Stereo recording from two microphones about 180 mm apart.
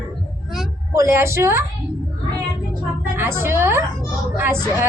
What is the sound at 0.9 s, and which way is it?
Speech, 15° right (ahead or behind).